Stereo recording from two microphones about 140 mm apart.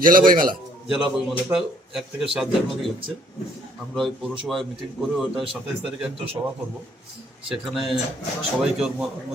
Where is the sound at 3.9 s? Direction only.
Centre (ahead or behind).